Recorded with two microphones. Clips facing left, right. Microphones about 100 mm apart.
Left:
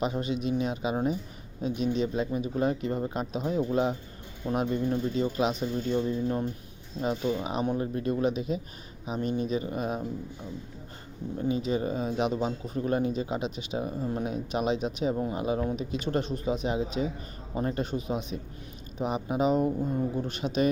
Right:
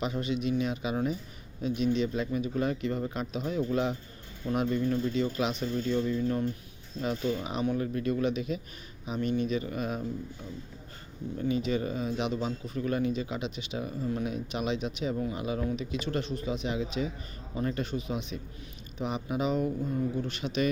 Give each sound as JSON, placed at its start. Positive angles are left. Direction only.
{"t": 0.0, "sound": "speech", "side_deg": 35}
{"t": 5.6, "sound": "speech", "side_deg": 20}
{"t": 7.0, "sound": "speech", "side_deg": 20}
{"t": 7.4, "sound": "speech", "side_deg": 40}
{"t": 11.3, "sound": "speech", "side_deg": 30}